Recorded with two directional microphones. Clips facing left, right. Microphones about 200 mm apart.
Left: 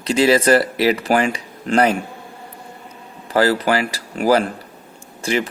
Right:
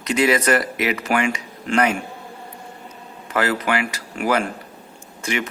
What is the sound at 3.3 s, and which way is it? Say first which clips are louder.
Speech: left 5 dB; 35° left (ahead or behind).